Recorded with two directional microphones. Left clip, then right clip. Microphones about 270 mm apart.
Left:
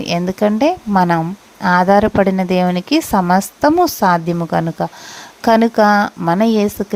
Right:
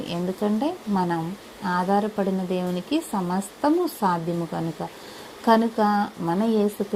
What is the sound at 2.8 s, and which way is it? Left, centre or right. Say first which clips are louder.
Speech: left 10 dB; left.